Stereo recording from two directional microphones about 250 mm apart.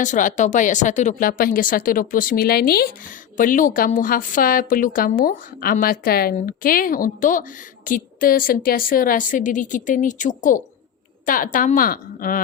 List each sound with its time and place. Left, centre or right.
0.0 s a woman's voice: left